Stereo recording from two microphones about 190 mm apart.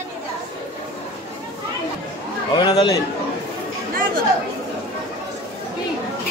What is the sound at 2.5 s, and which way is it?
Speech, 25° left (ahead or behind).